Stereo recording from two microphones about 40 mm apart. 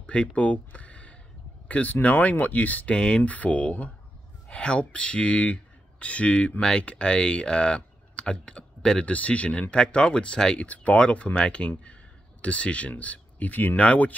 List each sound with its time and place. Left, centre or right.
0.0 s speech: left
2.9 s speech: left
9.0 s speech: left
9.8 s speech: left
10.6 s speech: left